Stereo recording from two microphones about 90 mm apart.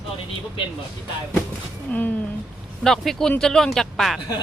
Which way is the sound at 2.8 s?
5° left (ahead or behind).